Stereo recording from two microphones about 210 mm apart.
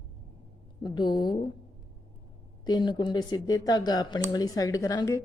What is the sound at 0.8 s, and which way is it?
Speech, 20° left (ahead or behind).